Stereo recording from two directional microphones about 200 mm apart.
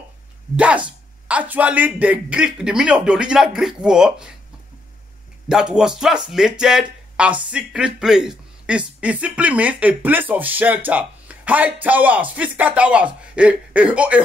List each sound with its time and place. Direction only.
0.6 s a man's voice: 5° right (ahead or behind)
5.5 s a man's voice: 5° right (ahead or behind)